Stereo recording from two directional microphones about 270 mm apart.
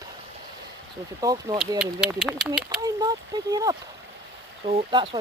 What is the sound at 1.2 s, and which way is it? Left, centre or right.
Speech, centre.